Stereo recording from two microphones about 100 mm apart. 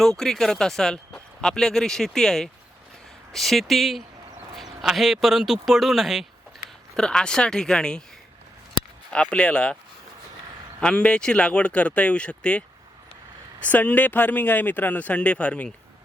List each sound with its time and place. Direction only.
0.0 s a man's voice: 5° left (ahead or behind)
9.0 s a man's voice: 10° left (ahead or behind)
10.8 s a man's voice: 10° left (ahead or behind)